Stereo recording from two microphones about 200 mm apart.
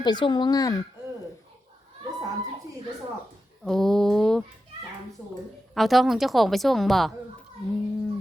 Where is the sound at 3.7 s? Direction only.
Centre (ahead or behind).